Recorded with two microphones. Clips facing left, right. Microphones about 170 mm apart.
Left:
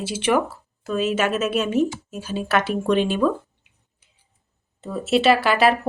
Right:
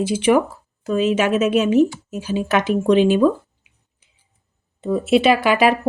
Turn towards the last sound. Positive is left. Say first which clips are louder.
# right 2 dB
turn(degrees=-15)  # may be behind; listen again after turning